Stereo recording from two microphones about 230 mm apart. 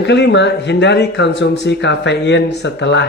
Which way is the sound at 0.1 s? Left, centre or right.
Left.